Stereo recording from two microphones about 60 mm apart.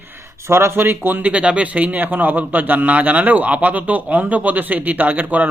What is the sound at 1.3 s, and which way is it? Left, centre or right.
Speech, right.